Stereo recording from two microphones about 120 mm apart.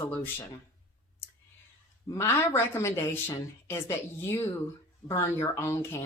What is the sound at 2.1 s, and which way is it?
A woman's voice, 20° left (ahead or behind).